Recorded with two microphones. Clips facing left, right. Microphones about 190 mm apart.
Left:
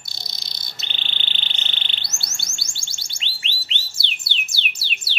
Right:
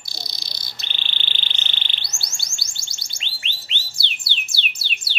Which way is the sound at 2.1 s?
25° left (ahead or behind).